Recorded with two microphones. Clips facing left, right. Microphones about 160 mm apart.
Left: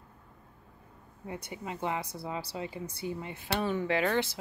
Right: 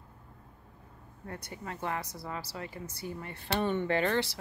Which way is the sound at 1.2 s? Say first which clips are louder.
Left 2 dB; 15° left (ahead or behind).